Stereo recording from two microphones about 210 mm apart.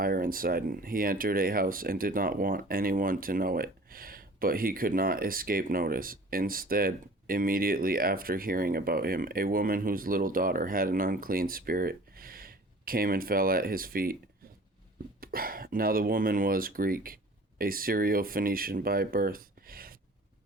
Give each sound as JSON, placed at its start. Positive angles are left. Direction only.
{"t": 0.0, "sound": "speech", "side_deg": -45}
{"t": 15.2, "sound": "speech", "side_deg": -45}